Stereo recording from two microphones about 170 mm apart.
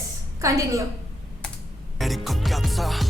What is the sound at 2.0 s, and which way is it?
Music, centre (ahead or behind).